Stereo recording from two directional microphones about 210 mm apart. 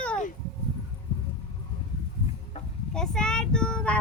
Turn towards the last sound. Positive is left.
turn(degrees=5)  # may be behind; listen again after turning